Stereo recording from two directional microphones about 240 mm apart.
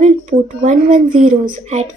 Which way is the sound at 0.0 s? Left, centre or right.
Right.